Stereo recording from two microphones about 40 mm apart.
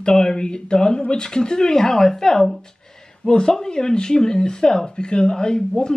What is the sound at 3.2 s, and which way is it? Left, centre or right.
Speech, left.